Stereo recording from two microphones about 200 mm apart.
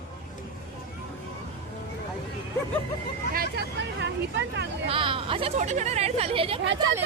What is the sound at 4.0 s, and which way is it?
Vehicle, 60° right (ahead or behind).